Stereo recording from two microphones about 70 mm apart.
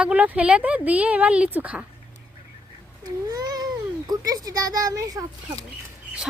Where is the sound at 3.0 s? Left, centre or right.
Right.